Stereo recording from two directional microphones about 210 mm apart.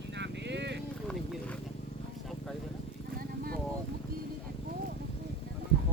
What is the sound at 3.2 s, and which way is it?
Vehicle, 45° right (ahead or behind).